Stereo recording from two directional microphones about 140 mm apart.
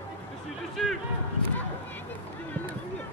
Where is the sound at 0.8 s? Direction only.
5° left (ahead or behind).